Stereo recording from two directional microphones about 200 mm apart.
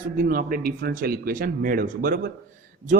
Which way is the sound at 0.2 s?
45° right (ahead or behind).